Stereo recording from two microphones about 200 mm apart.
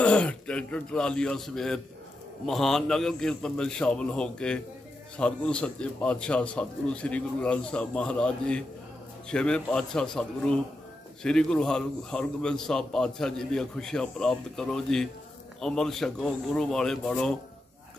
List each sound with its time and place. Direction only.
0.0 s a man's voice: 5° left (ahead or behind)